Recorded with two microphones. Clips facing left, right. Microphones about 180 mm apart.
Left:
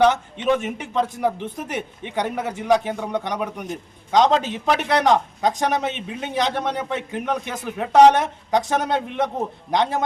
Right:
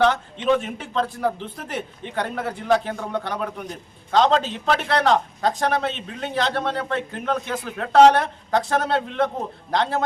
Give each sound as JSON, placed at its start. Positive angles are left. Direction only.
{"t": 0.0, "sound": "a man's voice", "side_deg": 15}